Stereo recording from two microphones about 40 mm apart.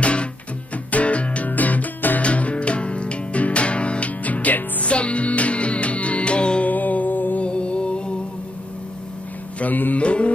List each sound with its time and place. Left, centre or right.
0.0 s music: left
1.5 s music: left
2.2 s music: left
6.6 s music: left
7.3 s music: left
9.6 s music: left
9.9 s music: left